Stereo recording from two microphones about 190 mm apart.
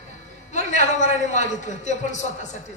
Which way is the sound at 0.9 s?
40° left (ahead or behind).